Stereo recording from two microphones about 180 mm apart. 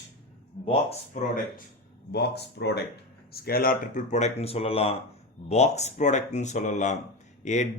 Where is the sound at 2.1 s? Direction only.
65° left (ahead or behind).